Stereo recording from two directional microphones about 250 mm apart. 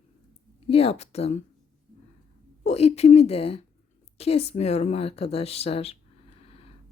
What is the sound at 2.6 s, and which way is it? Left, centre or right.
A woman's voice, left.